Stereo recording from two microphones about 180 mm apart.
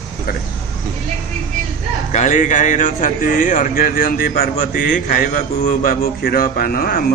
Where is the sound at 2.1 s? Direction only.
40° left (ahead or behind).